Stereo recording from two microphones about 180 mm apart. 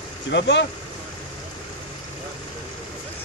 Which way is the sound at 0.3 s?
75° left (ahead or behind).